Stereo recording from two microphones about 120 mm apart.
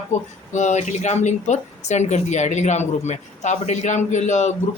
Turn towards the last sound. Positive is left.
turn(degrees=80)